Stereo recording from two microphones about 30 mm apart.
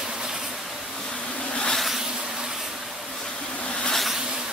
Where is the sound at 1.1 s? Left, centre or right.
Left.